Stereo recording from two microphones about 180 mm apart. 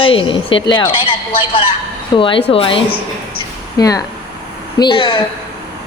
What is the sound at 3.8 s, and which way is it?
Speech, 20° left (ahead or behind).